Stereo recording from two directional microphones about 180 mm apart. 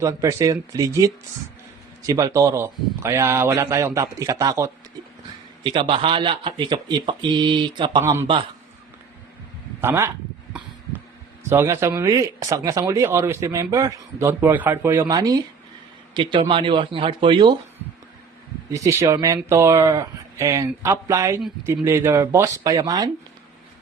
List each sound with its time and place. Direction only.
0.0 s speech: 15° right (ahead or behind)
8.0 s speech: 15° right (ahead or behind)
9.8 s speech: 15° right (ahead or behind)
11.4 s speech: 15° right (ahead or behind)
18.7 s speech: 15° right (ahead or behind)